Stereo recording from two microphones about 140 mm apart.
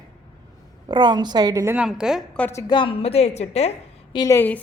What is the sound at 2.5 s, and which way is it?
A woman's voice, 35° left (ahead or behind).